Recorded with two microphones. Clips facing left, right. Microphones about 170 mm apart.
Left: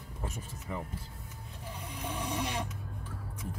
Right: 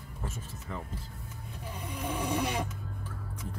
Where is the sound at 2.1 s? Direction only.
60° right (ahead or behind).